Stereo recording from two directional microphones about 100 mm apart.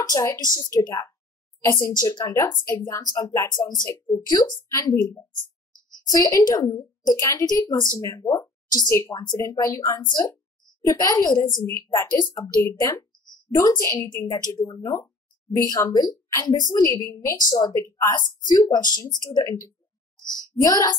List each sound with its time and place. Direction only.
0.0 s speech: 35° left (ahead or behind)
8.8 s speech: 30° left (ahead or behind)
9.1 s speech: 45° left (ahead or behind)
9.4 s speech: 35° left (ahead or behind)
13.9 s speech: 50° left (ahead or behind)
14.8 s speech: 30° left (ahead or behind)